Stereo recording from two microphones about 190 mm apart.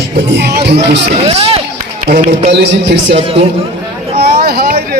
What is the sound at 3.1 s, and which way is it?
Speech, 30° right (ahead or behind).